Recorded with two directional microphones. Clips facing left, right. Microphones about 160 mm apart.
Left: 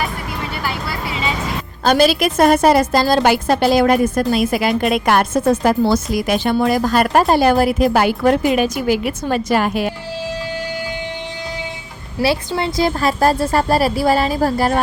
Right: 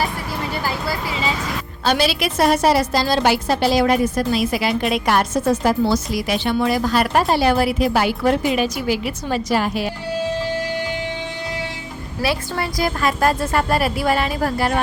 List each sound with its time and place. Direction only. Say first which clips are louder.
0.6 s vehicle: even; 35° right (ahead or behind)
1.8 s a woman's voice: left 5 dB; 45° left (ahead or behind)
12.2 s a woman's voice: left 5 dB; 25° left (ahead or behind)